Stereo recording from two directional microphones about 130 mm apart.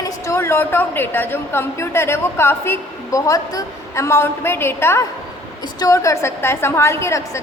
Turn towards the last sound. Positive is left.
turn(degrees=20)  # may be behind; listen again after turning